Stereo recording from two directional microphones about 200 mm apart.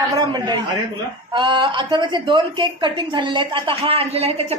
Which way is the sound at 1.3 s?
25° right (ahead or behind).